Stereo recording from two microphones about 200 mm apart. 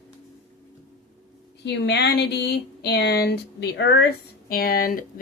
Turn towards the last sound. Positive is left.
turn(degrees=45)  # may be behind; listen again after turning